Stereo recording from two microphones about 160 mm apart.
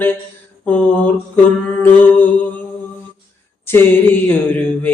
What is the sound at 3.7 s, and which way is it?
Mantra, 10° left (ahead or behind).